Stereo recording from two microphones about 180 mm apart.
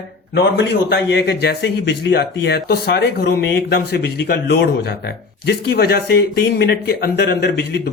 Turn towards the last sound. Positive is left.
turn(degrees=65)  # may be behind; listen again after turning